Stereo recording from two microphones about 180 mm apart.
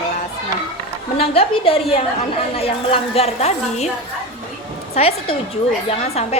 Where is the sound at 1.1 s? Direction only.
30° left (ahead or behind).